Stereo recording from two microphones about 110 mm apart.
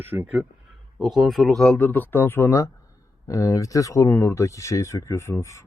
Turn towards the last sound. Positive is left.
turn(degrees=25)  # may be behind; listen again after turning